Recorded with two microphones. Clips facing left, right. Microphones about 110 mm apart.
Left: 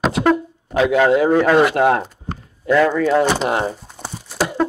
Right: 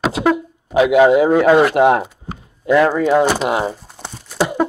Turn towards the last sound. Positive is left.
turn(degrees=-20)  # may be behind; listen again after turning